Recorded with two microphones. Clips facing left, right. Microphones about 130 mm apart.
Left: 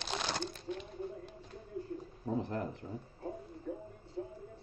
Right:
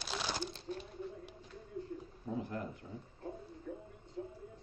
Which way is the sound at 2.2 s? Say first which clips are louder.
Left 4 dB; 40° left (ahead or behind).